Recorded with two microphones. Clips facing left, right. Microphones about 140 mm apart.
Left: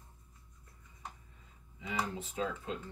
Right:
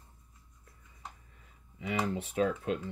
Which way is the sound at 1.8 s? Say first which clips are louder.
Right 5 dB; 70° right (ahead or behind).